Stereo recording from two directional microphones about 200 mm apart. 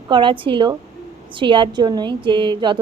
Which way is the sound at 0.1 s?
25° right (ahead or behind).